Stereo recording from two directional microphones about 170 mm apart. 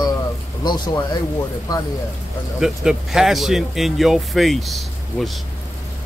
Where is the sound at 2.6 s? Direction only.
5° right (ahead or behind).